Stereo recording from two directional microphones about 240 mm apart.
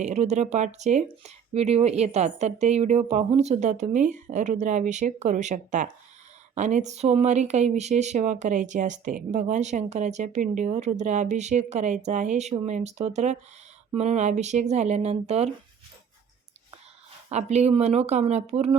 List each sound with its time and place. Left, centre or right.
0.0 s speech: right
17.2 s speech: right